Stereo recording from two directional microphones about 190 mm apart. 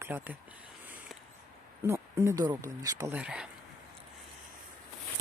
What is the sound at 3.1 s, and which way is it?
Speech, 5° right (ahead or behind).